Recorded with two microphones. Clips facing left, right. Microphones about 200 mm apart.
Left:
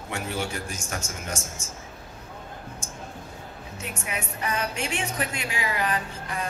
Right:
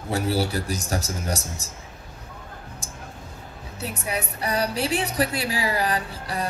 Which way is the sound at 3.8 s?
35° right (ahead or behind).